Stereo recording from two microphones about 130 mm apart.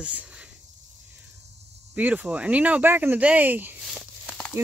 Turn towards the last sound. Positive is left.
turn(degrees=10)  # may be behind; listen again after turning